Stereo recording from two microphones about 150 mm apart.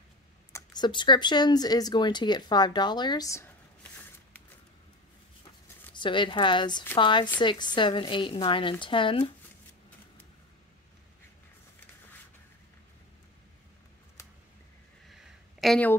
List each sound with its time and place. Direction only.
0.5 s speech: 25° left (ahead or behind)
5.9 s a woman's voice: 35° left (ahead or behind)
15.0 s a sound: centre (ahead or behind)